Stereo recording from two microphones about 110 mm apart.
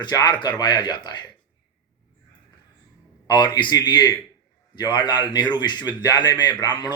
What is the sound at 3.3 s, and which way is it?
A man's voice, 40° left (ahead or behind).